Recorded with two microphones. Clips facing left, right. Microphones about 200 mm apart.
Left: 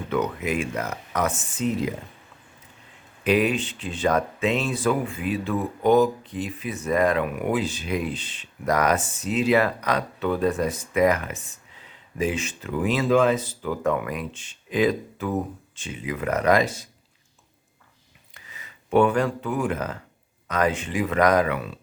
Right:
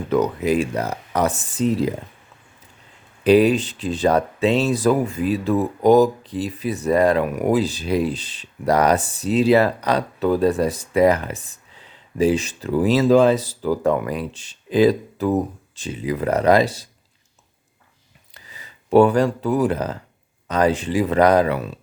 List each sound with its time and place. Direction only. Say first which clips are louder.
0.1 s speech: right 6 dB; 35° right (ahead or behind)
3.2 s speech: right 7 dB; 35° right (ahead or behind)
18.3 s speech: right 2 dB; 35° right (ahead or behind)